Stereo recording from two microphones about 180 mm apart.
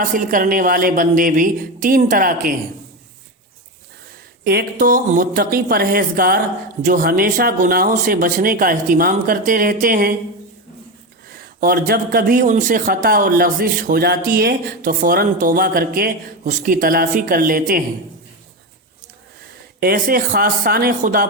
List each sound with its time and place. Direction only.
0.0 s speech: 50° right (ahead or behind)
4.4 s speech: 55° right (ahead or behind)
11.3 s speech: 55° right (ahead or behind)
19.8 s speech: 55° right (ahead or behind)